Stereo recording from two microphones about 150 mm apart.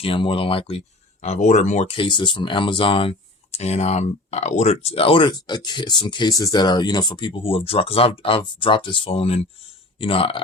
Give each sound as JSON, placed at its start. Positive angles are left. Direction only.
{"t": 0.0, "sound": "speech", "side_deg": 35}
{"t": 1.2, "sound": "speech", "side_deg": 50}